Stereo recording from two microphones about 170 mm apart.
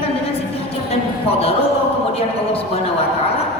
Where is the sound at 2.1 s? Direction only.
35° left (ahead or behind).